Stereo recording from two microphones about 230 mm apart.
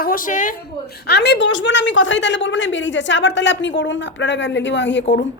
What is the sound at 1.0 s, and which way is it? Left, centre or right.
A woman's voice, left.